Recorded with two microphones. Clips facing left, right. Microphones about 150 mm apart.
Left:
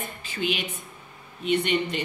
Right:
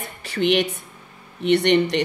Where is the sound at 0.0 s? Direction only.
70° right (ahead or behind).